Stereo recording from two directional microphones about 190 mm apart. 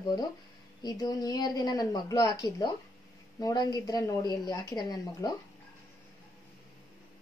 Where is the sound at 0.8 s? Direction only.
20° left (ahead or behind).